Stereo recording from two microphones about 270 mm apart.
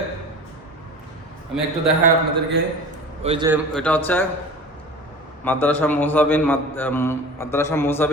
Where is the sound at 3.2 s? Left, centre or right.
Right.